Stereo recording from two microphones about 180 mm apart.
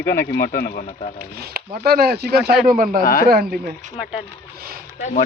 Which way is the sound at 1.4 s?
55° right (ahead or behind).